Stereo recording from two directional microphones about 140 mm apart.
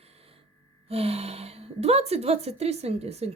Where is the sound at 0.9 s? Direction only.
45° right (ahead or behind).